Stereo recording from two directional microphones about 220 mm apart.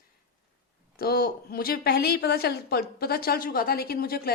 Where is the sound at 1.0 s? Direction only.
45° left (ahead or behind).